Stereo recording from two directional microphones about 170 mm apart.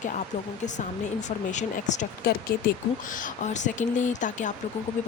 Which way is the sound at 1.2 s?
45° left (ahead or behind).